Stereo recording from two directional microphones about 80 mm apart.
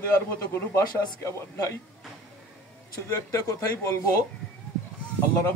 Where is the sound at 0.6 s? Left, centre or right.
Left.